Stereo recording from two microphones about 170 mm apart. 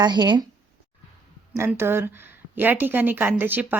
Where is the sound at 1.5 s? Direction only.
15° right (ahead or behind).